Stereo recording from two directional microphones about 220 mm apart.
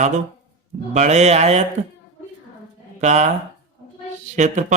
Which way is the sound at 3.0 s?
30° right (ahead or behind).